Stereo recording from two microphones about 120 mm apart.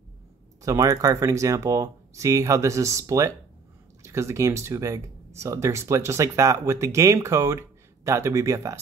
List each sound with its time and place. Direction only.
0.6 s speech: 30° right (ahead or behind)